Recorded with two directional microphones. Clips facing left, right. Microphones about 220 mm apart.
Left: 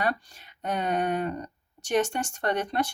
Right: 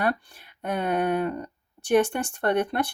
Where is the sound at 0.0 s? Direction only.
55° right (ahead or behind).